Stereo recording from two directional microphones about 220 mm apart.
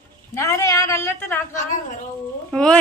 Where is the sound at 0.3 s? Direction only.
15° left (ahead or behind).